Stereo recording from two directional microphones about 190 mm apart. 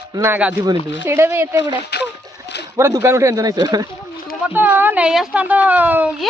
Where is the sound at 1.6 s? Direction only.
60° left (ahead or behind).